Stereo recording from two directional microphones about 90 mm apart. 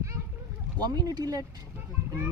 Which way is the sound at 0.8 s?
50° right (ahead or behind).